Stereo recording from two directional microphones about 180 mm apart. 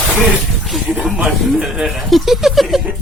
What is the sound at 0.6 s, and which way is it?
Speech, centre (ahead or behind).